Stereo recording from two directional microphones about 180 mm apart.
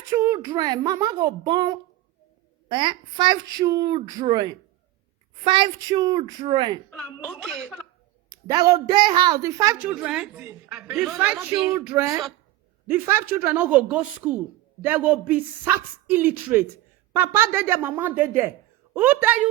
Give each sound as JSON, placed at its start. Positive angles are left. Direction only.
{"t": 0.2, "sound": "a woman's voice", "side_deg": -20}
{"t": 7.3, "sound": "a woman's voice", "side_deg": 5}
{"t": 8.3, "sound": "a woman's voice", "side_deg": -20}